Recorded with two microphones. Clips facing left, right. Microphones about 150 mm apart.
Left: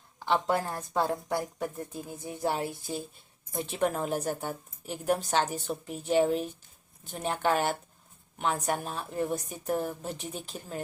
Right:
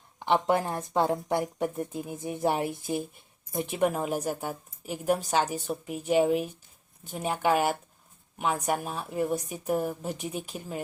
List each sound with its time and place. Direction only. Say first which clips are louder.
0.3 s a woman's voice: right 3 dB; 20° right (ahead or behind)